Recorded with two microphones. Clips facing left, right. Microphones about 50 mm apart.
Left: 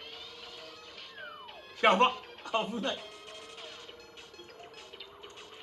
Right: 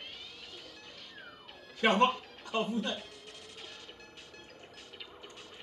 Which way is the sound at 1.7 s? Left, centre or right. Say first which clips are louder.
Left 2 dB; left.